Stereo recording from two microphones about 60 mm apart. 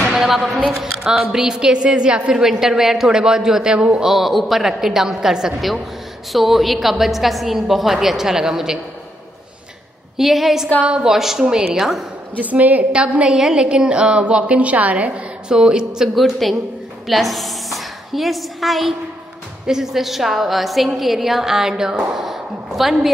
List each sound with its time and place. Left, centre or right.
0.1 s a woman's voice: centre
4.0 s a woman's voice: centre
10.1 s a woman's voice: centre
10.8 s a woman's voice: centre
11.1 s a woman's voice: centre
12.4 s a woman's voice: right
16.2 s a woman's voice: centre